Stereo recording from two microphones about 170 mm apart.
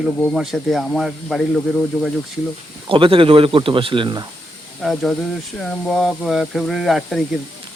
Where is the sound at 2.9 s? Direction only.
30° right (ahead or behind).